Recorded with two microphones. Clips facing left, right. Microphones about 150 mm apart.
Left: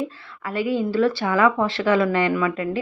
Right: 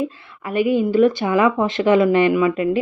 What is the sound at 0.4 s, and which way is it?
A woman's voice, 15° right (ahead or behind).